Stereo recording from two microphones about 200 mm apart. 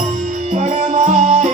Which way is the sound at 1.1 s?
35° right (ahead or behind).